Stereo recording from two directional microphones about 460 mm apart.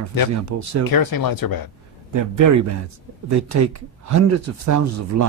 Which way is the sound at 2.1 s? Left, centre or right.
Right.